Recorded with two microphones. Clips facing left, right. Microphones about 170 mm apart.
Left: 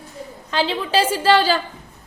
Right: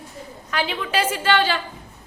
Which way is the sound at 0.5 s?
30° left (ahead or behind).